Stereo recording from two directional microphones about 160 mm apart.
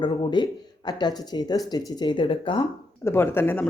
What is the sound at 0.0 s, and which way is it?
Speech, 25° left (ahead or behind).